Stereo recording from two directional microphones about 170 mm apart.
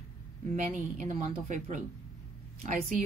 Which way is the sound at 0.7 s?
45° right (ahead or behind).